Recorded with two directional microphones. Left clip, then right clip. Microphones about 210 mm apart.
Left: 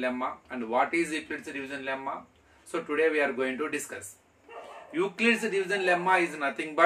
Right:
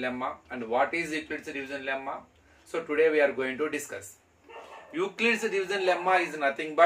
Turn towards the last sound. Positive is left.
turn(degrees=15)  # may be behind; listen again after turning